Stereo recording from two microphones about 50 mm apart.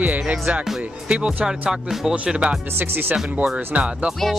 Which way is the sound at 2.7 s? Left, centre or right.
Right.